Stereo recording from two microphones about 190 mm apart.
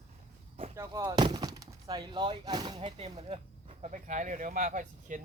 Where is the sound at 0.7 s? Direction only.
15° right (ahead or behind).